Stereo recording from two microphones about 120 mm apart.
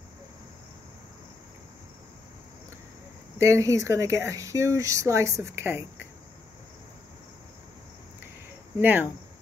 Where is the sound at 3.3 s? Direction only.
25° right (ahead or behind).